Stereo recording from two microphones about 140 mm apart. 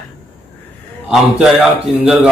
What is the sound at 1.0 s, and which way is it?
Speech, 5° right (ahead or behind).